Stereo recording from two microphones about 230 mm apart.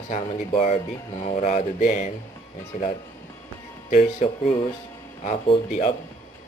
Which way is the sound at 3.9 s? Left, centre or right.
Left.